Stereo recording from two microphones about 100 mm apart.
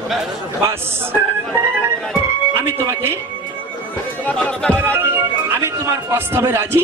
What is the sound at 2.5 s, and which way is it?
Music, 25° right (ahead or behind).